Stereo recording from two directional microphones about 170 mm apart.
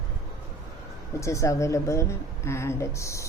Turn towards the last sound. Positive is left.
turn(degrees=15)  # may be behind; listen again after turning